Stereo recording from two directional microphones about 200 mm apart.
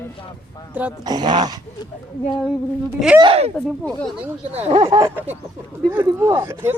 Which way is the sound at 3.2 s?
30° right (ahead or behind).